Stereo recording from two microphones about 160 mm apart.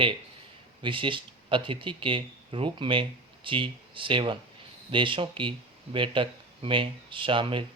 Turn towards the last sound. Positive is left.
turn(degrees=-30)  # may be behind; listen again after turning